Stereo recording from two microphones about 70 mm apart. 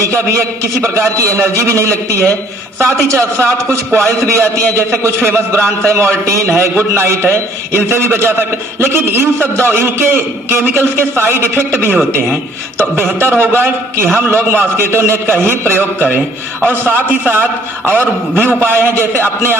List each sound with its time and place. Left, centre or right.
0.8 s a man's voice: right
13.1 s a man's voice: right